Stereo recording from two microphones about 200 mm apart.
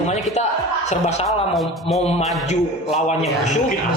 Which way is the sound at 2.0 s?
30° left (ahead or behind).